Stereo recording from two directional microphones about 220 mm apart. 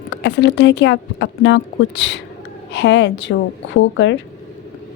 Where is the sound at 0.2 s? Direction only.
55° left (ahead or behind).